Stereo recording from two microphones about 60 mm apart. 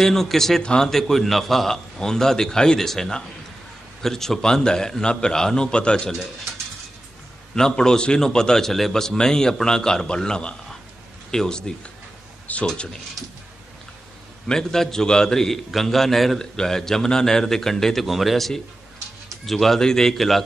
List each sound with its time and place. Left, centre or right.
0.0 s a man's voice: centre
7.5 s a man's voice: centre
14.5 s a man's voice: centre